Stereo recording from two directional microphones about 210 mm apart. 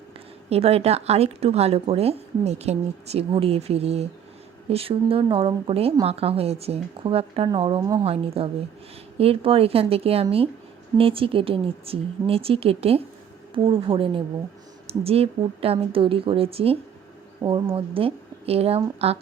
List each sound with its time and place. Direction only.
0.5 s a woman's voice: 30° right (ahead or behind)